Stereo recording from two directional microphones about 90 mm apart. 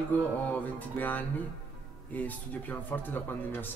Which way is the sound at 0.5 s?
20° left (ahead or behind).